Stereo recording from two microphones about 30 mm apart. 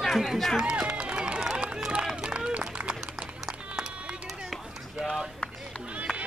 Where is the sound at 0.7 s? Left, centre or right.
Right.